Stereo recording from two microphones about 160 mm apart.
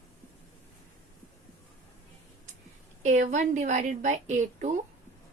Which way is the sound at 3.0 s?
50° right (ahead or behind).